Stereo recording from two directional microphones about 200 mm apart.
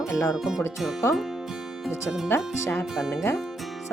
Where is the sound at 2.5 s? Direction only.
15° left (ahead or behind).